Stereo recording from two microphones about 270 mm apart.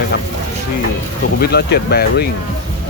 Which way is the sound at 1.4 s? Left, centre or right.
Left.